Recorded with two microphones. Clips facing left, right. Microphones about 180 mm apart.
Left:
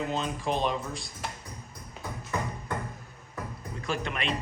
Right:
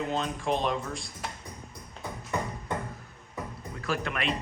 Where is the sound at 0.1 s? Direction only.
Centre (ahead or behind).